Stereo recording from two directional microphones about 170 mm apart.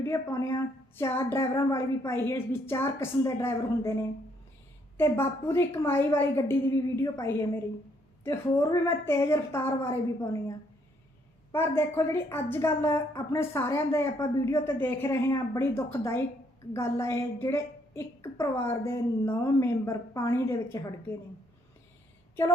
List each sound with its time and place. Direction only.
0.0 s a woman's voice: 20° left (ahead or behind)
4.9 s a woman's voice: 15° left (ahead or behind)
11.5 s a woman's voice: 15° left (ahead or behind)